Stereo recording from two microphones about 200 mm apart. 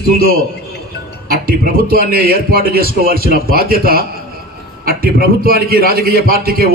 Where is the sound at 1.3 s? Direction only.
45° right (ahead or behind).